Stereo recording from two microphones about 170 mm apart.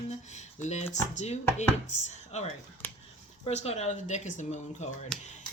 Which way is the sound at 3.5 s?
40° left (ahead or behind).